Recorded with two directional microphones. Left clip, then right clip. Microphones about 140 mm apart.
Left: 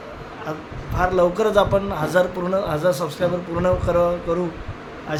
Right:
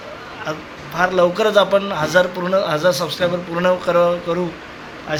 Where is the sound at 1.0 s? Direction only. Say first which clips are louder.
Right 3 dB; 20° left (ahead or behind).